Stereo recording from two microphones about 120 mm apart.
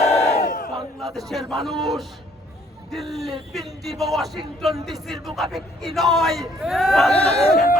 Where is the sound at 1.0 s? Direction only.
Centre (ahead or behind).